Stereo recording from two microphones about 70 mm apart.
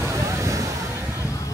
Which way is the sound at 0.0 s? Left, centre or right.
Right.